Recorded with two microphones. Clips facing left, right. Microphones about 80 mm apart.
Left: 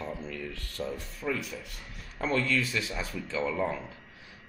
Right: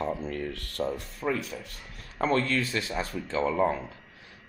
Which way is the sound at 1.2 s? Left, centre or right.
Right.